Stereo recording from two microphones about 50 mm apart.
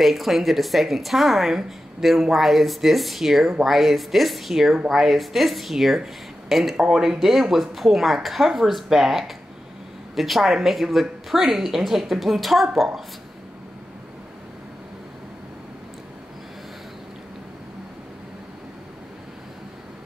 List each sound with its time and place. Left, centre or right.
0.0 s a woman's voice: centre